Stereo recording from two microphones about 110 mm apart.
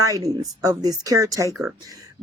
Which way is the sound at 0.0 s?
30° right (ahead or behind).